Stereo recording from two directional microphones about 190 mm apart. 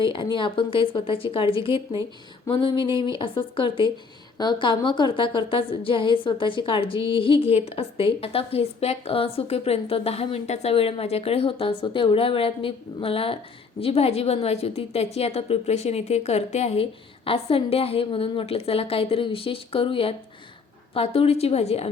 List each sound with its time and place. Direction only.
0.0 s a woman's voice: 25° left (ahead or behind)